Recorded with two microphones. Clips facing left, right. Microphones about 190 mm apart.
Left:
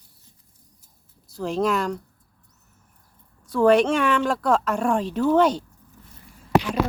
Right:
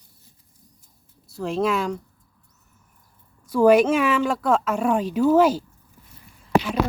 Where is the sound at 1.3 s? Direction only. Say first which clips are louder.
Even; centre (ahead or behind).